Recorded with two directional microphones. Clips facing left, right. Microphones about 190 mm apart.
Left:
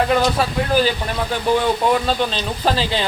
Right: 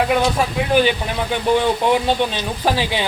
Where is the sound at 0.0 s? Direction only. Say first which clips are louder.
Even; 10° right (ahead or behind).